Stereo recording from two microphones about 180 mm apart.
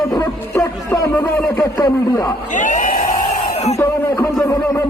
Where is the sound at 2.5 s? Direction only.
45° left (ahead or behind).